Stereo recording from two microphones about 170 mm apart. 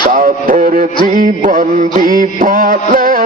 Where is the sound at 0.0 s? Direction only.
55° right (ahead or behind).